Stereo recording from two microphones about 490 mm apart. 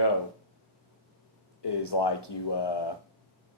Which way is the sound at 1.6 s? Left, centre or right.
Left.